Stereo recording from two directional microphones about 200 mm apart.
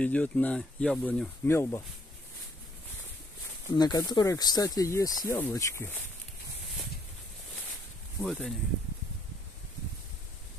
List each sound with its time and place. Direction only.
0.0 s speech: 5° left (ahead or behind)
3.7 s speech: 20° left (ahead or behind)
8.2 s speech: centre (ahead or behind)